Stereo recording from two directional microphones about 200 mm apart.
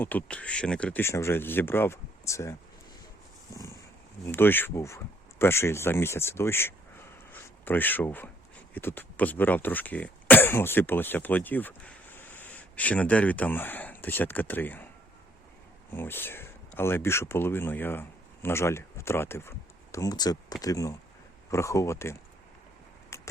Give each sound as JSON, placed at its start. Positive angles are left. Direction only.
{"t": 0.0, "sound": "speech", "side_deg": 10}
{"t": 4.3, "sound": "speech", "side_deg": 10}
{"t": 15.9, "sound": "speech", "side_deg": 10}